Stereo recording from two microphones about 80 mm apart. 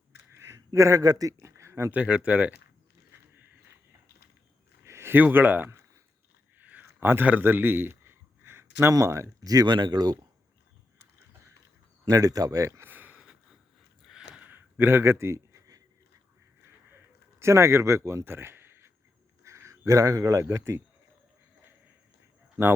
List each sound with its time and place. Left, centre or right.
0.3 s speech: right
1.4 s a sound: right
1.9 s speech: centre
4.9 s speech: right
6.6 s a sound: centre
8.9 s speech: right
9.4 s speech: right
12.0 s speech: right
12.8 s a sound: right
14.1 s a sound: centre
14.4 s speech: right
17.4 s speech: right
22.6 s speech: right